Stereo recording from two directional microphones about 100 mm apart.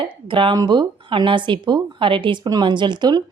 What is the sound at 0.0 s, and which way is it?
A woman's voice, 60° right (ahead or behind).